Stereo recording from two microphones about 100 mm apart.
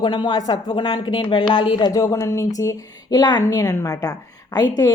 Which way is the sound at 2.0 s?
30° left (ahead or behind).